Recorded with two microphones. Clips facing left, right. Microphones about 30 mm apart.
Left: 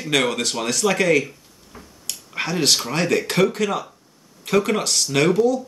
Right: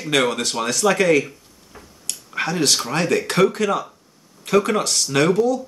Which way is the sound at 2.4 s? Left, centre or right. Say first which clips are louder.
Even; centre.